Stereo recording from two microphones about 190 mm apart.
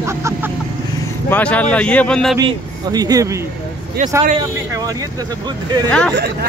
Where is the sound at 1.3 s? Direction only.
10° left (ahead or behind).